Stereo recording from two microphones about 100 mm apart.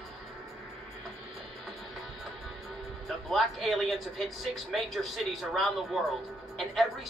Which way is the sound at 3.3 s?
Centre (ahead or behind).